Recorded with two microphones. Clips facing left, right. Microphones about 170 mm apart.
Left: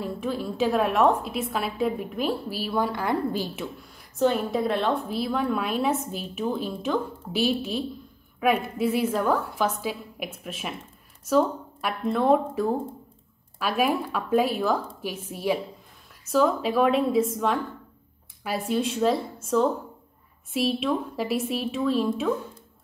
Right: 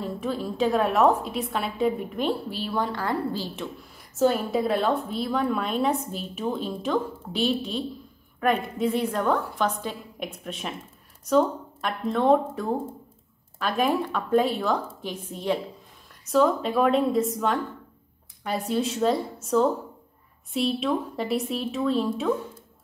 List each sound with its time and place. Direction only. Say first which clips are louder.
0.0 s a woman's voice: even; centre (ahead or behind)
4.2 s a woman's voice: right 1 dB; centre (ahead or behind)